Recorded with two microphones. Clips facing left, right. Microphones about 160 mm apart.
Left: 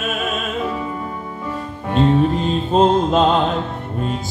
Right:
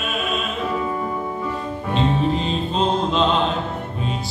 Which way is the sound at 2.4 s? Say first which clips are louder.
Left 6 dB; 45° left (ahead or behind).